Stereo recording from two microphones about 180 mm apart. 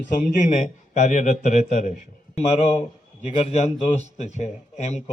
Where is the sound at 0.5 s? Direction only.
45° left (ahead or behind).